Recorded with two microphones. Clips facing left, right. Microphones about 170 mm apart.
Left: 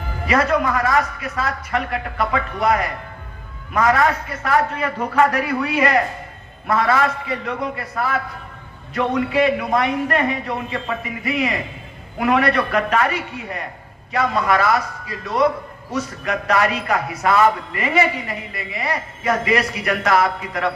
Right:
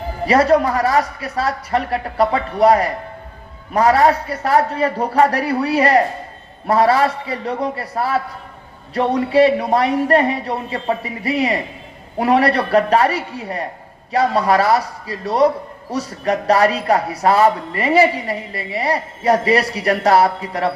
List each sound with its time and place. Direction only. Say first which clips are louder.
0.3 s a man's voice: right 5 dB; 35° right (ahead or behind)